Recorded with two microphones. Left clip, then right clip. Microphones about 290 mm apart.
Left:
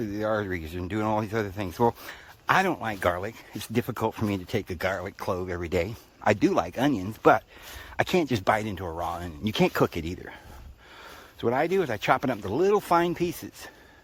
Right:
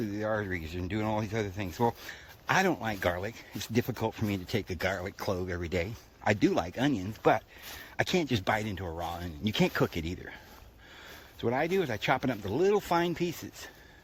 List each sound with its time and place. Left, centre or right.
0.0 s speech: centre
11.3 s speech: centre